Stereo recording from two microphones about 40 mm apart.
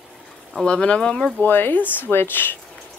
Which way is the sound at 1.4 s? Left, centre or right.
Left.